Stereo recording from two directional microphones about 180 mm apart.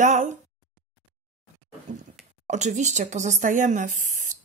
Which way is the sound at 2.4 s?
40° right (ahead or behind).